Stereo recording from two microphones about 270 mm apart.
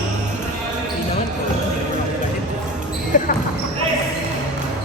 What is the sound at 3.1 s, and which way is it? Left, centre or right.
Basketball bounce, left.